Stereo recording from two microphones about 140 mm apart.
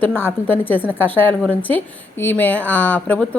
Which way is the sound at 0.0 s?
15° left (ahead or behind).